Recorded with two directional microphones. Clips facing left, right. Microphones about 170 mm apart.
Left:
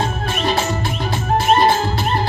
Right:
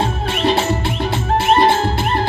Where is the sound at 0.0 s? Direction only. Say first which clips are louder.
Right 3 dB; 25° right (ahead or behind).